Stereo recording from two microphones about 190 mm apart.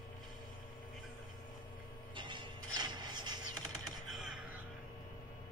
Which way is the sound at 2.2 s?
25° right (ahead or behind).